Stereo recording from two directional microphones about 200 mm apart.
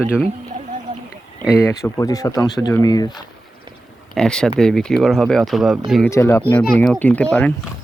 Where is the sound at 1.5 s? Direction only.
15° left (ahead or behind).